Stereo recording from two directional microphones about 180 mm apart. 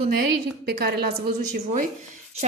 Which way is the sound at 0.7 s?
60° right (ahead or behind).